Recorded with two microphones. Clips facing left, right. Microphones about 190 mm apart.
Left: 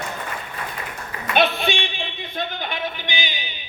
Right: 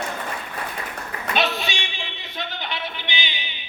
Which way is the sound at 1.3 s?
55° left (ahead or behind).